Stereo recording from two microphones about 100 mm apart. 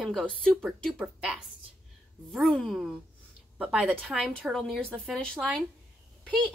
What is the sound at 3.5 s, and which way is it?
Speech, 10° right (ahead or behind).